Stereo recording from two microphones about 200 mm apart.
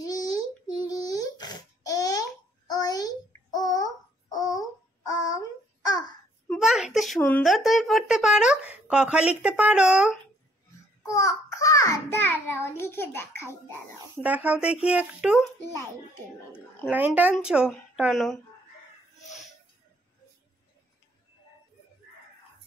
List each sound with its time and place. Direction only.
0.0 s a sound: 20° left (ahead or behind)
5.9 s babbling: 20° left (ahead or behind)
6.5 s a sound: centre (ahead or behind)
7.2 s speech: 10° left (ahead or behind)
11.0 s child singing: 15° left (ahead or behind)
14.1 s speech: 5° right (ahead or behind)
16.8 s speech: 5° right (ahead or behind)